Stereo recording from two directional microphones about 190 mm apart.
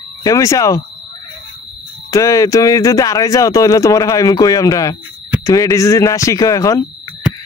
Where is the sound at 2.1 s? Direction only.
15° left (ahead or behind).